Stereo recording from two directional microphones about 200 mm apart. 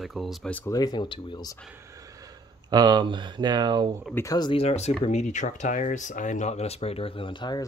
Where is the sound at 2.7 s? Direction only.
20° right (ahead or behind).